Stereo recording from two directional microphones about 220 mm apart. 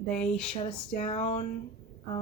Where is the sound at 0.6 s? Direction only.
20° left (ahead or behind).